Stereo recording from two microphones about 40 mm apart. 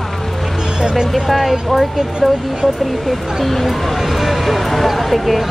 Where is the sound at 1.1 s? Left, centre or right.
Centre.